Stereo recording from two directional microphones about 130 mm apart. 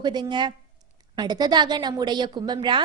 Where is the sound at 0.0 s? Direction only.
35° right (ahead or behind).